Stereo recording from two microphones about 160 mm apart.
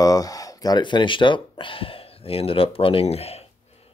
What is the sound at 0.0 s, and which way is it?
Speech, 20° left (ahead or behind).